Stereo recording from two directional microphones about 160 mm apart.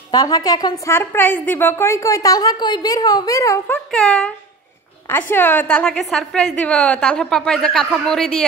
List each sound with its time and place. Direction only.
0.1 s a woman's voice: 25° left (ahead or behind)
0.9 s a woman's voice: 15° left (ahead or behind)
3.9 s a woman's voice: 5° left (ahead or behind)
5.0 s a woman's voice: 15° left (ahead or behind)